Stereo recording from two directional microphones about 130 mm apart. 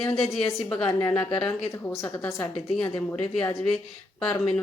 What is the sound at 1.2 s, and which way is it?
Speech, 35° left (ahead or behind).